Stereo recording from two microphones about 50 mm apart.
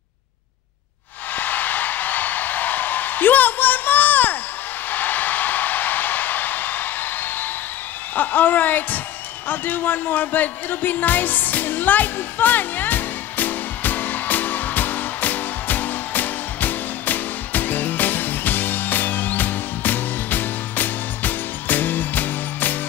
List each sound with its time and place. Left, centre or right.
1.3 s a sound: left
8.2 s speech: left
9.5 s music: left